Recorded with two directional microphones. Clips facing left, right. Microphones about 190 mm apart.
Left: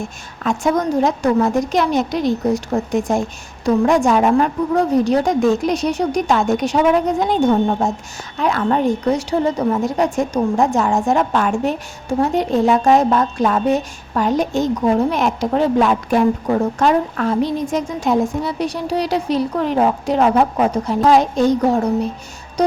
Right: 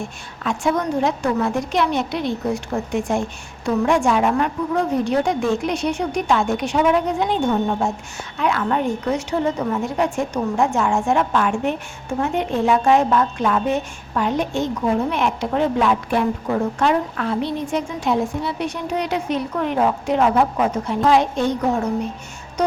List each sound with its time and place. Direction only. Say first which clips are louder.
0.4 s a woman's voice: left 3 dB; 40° left (ahead or behind)